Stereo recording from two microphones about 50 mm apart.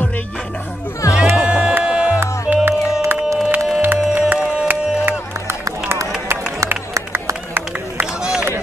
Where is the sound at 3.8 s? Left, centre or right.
Right.